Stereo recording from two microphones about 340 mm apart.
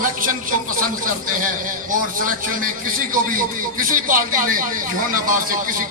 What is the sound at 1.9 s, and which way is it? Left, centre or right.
A man's voice, right.